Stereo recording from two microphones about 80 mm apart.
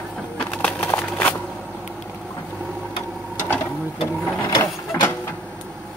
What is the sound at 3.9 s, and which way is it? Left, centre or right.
Speech, left.